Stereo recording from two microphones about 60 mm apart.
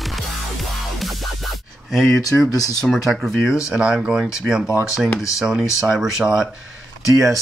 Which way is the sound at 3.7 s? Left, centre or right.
Centre.